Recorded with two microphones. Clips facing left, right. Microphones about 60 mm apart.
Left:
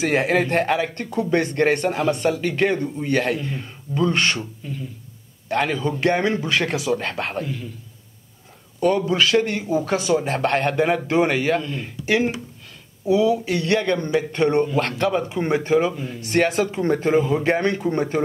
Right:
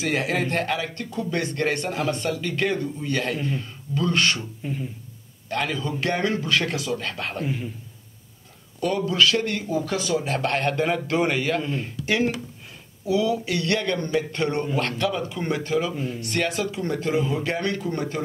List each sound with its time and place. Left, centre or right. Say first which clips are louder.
0.0 s a man's voice: left 5 dB; left
3.4 s a man's voice: right 1 dB; left
5.5 s a man's voice: left 5 dB; left
7.4 s a man's voice: right 2 dB; centre
8.7 s a man's voice: left 3 dB; left
11.2 s a man's voice: left 3 dB; left
14.8 s speech: left 4 dB; left